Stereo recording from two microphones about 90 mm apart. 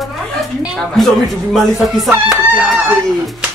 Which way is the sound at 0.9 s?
5° left (ahead or behind).